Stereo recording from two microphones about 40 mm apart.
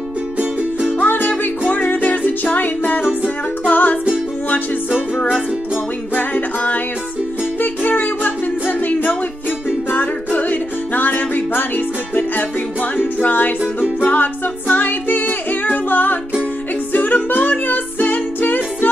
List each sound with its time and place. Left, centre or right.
0.9 s music: left
6.1 s music: left